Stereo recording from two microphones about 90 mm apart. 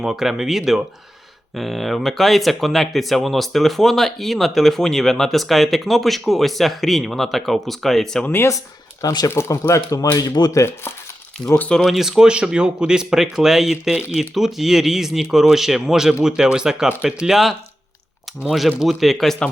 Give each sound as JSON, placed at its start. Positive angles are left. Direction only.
{"t": 0.0, "sound": "speech", "side_deg": -5}
{"t": 8.2, "sound": "speech", "side_deg": 25}
{"t": 8.4, "sound": "speech", "side_deg": 40}
{"t": 9.3, "sound": "speech", "side_deg": 30}
{"t": 11.7, "sound": "speech", "side_deg": 0}